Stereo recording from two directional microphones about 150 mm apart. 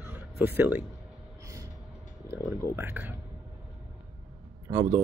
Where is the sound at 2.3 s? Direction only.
15° right (ahead or behind).